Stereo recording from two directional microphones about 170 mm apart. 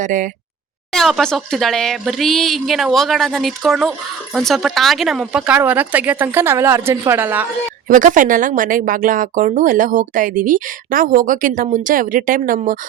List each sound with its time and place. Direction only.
0.0 s speech: 50° right (ahead or behind)
0.9 s speech: centre (ahead or behind)
7.9 s speech: 50° right (ahead or behind)